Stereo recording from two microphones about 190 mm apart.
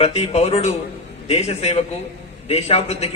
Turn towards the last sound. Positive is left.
turn(degrees=35)  # may be behind; listen again after turning